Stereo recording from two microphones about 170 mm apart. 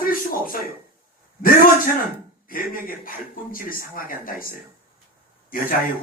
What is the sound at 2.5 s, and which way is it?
Speech, 55° left (ahead or behind).